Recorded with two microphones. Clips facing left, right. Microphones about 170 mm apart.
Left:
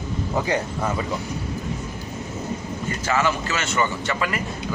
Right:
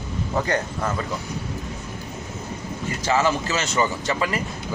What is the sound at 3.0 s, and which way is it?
Speech, 35° right (ahead or behind).